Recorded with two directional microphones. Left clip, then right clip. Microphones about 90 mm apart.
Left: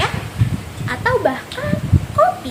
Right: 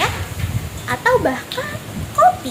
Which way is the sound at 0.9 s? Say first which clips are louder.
Right 1 dB; 15° left (ahead or behind).